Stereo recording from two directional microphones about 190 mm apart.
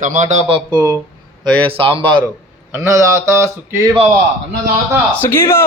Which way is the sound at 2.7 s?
15° right (ahead or behind).